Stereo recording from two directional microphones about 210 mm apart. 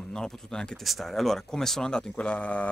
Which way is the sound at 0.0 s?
5° left (ahead or behind).